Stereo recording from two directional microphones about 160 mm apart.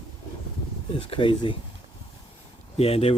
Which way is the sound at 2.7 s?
40° left (ahead or behind).